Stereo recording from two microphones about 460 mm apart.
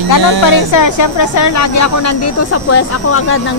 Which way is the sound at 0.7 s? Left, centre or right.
Left.